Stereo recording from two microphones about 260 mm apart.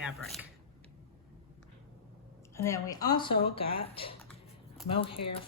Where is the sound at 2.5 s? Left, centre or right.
Centre.